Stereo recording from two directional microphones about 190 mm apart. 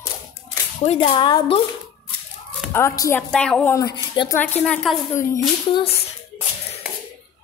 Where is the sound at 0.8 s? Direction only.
30° left (ahead or behind).